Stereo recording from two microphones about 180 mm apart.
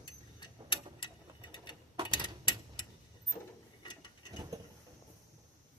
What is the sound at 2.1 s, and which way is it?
Clock, 25° left (ahead or behind).